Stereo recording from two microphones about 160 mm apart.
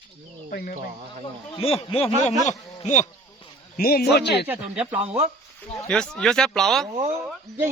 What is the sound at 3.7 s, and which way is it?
Speech, 70° left (ahead or behind).